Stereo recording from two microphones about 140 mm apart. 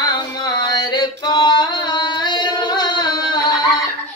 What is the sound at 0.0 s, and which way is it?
Music, 30° left (ahead or behind).